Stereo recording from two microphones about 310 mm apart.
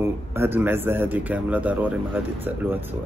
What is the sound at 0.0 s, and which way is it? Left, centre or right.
Speech, centre.